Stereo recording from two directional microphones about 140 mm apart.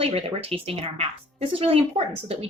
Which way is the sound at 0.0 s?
45° right (ahead or behind).